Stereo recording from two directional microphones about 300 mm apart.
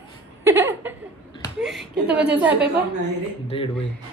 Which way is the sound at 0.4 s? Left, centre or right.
Centre.